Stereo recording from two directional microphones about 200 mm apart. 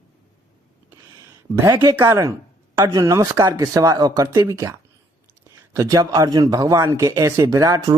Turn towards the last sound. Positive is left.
turn(degrees=-20)  # may be behind; listen again after turning